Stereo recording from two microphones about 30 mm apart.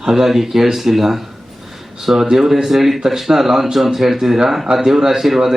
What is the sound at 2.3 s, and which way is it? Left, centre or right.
Speech, centre.